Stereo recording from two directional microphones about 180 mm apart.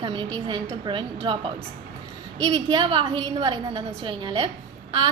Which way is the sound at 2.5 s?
30° right (ahead or behind).